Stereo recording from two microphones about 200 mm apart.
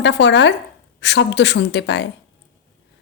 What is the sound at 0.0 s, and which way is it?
A woman's voice, 60° left (ahead or behind).